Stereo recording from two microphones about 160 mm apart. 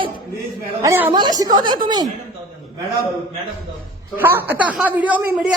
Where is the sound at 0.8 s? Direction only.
15° right (ahead or behind).